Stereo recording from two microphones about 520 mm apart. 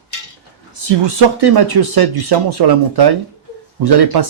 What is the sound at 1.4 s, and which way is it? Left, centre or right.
Speech, right.